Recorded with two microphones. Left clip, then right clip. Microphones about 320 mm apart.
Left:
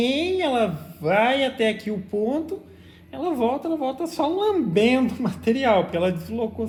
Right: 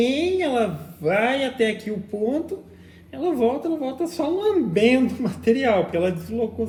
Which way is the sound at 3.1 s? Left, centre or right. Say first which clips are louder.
Right 2 dB; centre.